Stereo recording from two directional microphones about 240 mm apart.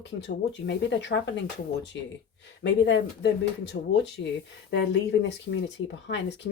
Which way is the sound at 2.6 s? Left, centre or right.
Left.